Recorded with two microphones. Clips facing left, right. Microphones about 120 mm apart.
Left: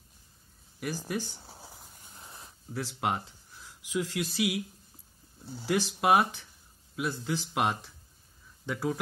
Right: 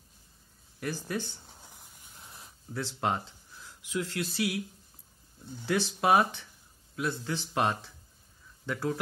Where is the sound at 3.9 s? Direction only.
15° left (ahead or behind).